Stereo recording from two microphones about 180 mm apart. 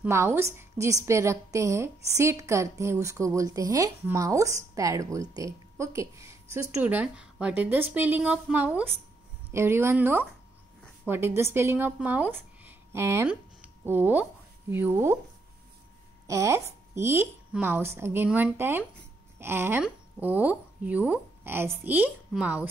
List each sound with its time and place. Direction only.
0.0 s a woman's voice: 15° right (ahead or behind)
16.3 s a woman's voice: 15° right (ahead or behind)